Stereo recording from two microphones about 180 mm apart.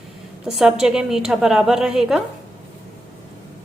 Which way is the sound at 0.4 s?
5° right (ahead or behind).